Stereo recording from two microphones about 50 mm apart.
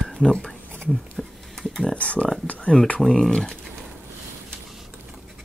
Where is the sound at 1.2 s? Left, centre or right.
Centre.